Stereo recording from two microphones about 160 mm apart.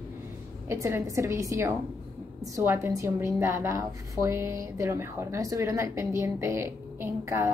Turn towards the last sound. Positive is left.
turn(degrees=-15)  # may be behind; listen again after turning